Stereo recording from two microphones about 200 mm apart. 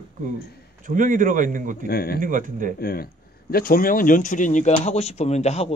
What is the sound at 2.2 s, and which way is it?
Speech, 40° right (ahead or behind).